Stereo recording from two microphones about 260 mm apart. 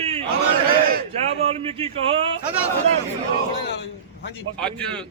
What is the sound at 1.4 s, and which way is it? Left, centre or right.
Speech, right.